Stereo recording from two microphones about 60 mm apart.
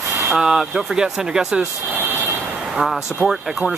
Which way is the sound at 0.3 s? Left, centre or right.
Centre.